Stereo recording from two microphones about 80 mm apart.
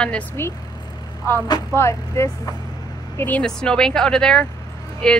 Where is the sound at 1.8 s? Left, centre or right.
Left.